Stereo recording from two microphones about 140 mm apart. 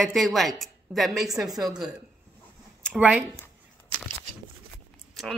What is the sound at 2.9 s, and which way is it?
Speech, 10° right (ahead or behind).